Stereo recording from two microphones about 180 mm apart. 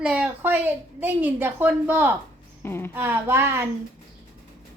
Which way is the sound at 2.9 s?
10° right (ahead or behind).